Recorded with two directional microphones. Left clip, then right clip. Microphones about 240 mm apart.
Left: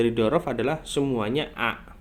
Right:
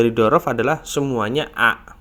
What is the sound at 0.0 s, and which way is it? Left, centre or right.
Speech, right.